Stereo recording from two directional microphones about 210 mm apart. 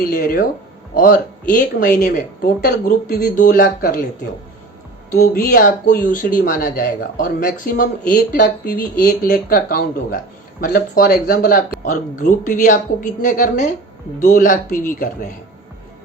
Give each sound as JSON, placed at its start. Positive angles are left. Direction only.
{"t": 0.0, "sound": "speech", "side_deg": 45}
{"t": 5.1, "sound": "speech", "side_deg": 45}